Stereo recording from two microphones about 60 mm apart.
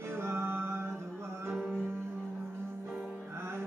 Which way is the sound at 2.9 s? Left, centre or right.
Centre.